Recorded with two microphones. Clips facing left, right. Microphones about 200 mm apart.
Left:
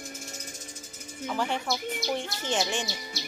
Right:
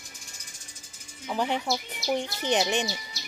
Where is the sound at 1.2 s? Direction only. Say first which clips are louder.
Right 2 dB; 15° right (ahead or behind).